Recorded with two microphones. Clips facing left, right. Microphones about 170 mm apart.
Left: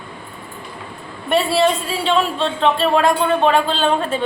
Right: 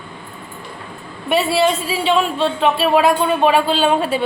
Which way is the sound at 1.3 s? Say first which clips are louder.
Even; 5° right (ahead or behind).